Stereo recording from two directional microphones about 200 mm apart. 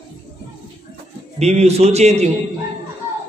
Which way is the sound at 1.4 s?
35° right (ahead or behind).